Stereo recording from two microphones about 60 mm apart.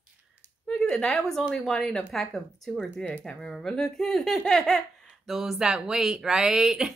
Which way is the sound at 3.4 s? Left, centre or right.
Centre.